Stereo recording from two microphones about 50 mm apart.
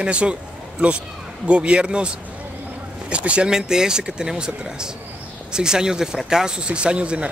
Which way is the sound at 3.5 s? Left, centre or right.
Centre.